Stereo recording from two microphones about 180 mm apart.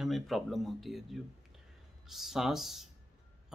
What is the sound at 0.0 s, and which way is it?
Speech, centre (ahead or behind).